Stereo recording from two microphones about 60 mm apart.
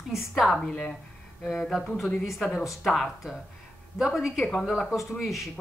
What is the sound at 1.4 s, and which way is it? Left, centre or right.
Speech, centre.